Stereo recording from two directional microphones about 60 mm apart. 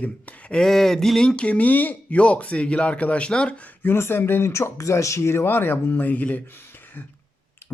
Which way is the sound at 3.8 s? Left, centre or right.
Left.